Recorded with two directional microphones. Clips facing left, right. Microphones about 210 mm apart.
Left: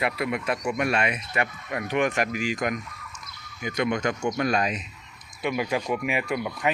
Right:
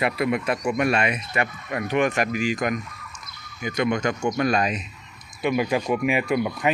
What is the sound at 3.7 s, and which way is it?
Speech, 70° right (ahead or behind).